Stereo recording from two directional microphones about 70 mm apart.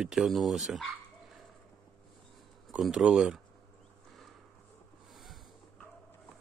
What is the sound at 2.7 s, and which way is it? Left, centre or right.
Speech, centre.